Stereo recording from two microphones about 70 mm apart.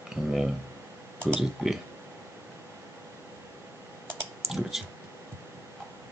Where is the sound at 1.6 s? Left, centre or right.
Centre.